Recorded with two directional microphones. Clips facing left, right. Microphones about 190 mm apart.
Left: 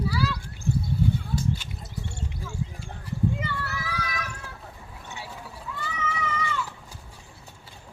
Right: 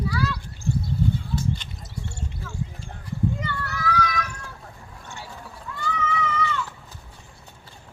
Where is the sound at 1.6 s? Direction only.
5° left (ahead or behind).